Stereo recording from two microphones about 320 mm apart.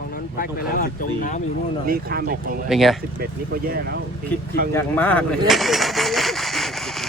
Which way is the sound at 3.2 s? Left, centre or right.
Right.